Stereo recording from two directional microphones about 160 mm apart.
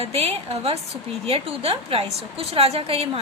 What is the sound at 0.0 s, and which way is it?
A woman's voice, 40° right (ahead or behind).